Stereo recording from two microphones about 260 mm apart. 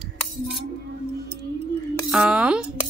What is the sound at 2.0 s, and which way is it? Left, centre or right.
Speech, centre.